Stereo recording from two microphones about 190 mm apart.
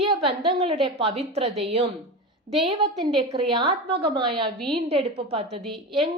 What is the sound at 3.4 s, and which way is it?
A woman's voice, 25° right (ahead or behind).